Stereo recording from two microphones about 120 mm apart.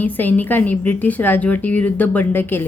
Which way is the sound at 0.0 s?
15° left (ahead or behind).